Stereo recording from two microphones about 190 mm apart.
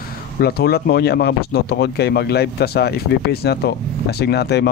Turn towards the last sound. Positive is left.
turn(degrees=60)  # may be behind; listen again after turning